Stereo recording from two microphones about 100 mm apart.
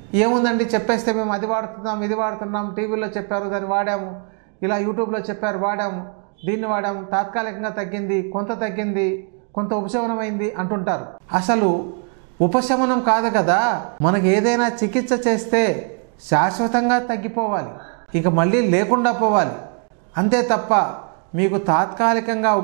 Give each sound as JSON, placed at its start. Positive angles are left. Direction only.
{"t": 0.1, "sound": "a man's voice", "side_deg": -15}